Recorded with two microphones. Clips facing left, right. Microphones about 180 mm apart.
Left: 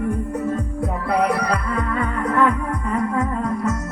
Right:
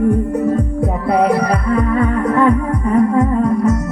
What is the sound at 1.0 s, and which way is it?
Music, 30° right (ahead or behind).